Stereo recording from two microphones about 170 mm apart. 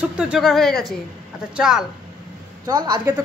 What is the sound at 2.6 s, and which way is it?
Speech, 25° right (ahead or behind).